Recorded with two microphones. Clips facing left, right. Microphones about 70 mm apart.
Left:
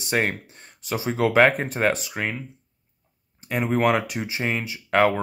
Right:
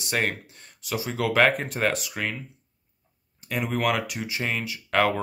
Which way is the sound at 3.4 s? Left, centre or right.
Left.